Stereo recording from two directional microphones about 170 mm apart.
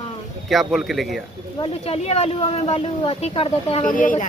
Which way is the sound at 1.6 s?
35° left (ahead or behind).